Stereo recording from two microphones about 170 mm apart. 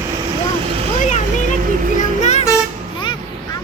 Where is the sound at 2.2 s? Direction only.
40° left (ahead or behind).